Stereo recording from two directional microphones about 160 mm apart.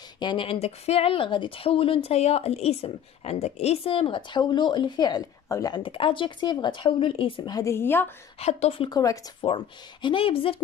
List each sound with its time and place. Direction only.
0.2 s speech: 30° left (ahead or behind); by 8.1 s 15° left (ahead or behind)
8.4 s speech: 40° left (ahead or behind); by 9.5 s 25° left (ahead or behind)
10.0 s speech: 35° left (ahead or behind)